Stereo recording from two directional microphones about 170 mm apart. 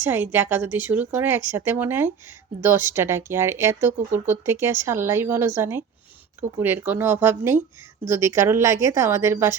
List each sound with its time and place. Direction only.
0.0 s speech: 10° right (ahead or behind)